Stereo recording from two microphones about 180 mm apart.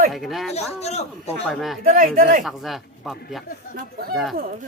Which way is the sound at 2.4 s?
Centre (ahead or behind).